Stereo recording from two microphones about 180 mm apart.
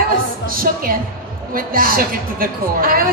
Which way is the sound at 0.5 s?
50° right (ahead or behind).